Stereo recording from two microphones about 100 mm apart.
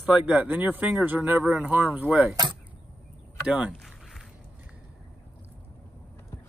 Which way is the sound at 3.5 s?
10° right (ahead or behind).